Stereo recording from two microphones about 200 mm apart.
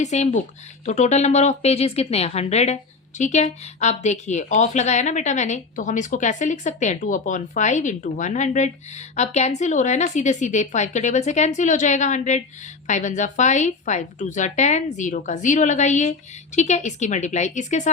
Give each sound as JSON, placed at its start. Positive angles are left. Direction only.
{"t": 0.0, "sound": "speech", "side_deg": 35}